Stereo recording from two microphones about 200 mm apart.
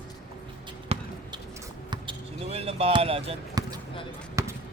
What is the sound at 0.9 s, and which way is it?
Basketball bounce, 30° right (ahead or behind).